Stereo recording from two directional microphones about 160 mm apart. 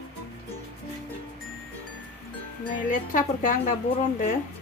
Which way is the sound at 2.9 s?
55° left (ahead or behind).